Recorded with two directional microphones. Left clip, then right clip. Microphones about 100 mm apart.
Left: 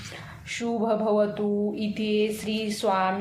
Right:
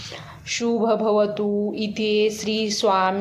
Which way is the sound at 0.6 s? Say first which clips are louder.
Right 5 dB; 25° right (ahead or behind).